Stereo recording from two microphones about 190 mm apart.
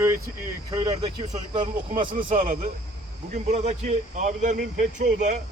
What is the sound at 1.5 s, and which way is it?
A man's voice, 25° right (ahead or behind).